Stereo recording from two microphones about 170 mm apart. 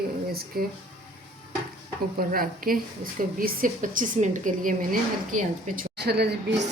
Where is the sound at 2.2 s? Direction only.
55° right (ahead or behind).